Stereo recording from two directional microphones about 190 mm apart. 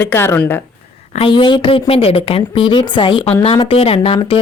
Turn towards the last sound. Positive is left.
turn(degrees=30)  # may be behind; listen again after turning